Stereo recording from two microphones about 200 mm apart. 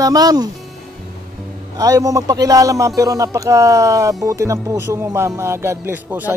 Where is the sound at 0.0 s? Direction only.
20° right (ahead or behind).